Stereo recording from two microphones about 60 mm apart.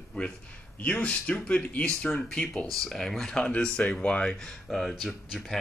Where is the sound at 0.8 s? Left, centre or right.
Left.